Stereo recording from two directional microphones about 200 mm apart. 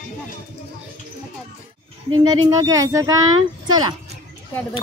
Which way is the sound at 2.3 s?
20° right (ahead or behind).